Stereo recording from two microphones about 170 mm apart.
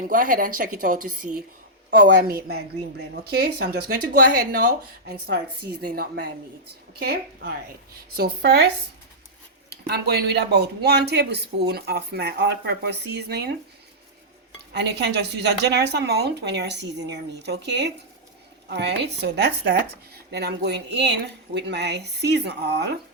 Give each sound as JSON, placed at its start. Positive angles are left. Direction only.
{"t": 0.1, "sound": "a woman's voice", "side_deg": -55}
{"t": 1.9, "sound": "speech", "side_deg": -65}
{"t": 14.7, "sound": "a woman's voice", "side_deg": -80}